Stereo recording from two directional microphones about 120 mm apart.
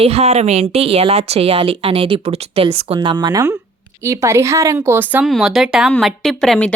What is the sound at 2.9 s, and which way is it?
Speech, 35° right (ahead or behind).